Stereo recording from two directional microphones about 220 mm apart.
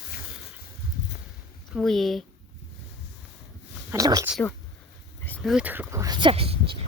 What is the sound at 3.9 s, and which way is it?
Speech, 15° right (ahead or behind).